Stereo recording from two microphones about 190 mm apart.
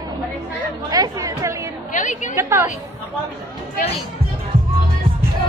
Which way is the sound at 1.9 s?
40° left (ahead or behind).